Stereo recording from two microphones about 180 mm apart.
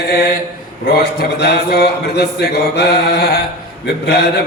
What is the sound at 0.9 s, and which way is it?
A man's voice, 55° left (ahead or behind).